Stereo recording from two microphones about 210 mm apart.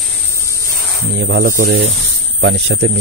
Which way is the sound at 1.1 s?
70° right (ahead or behind).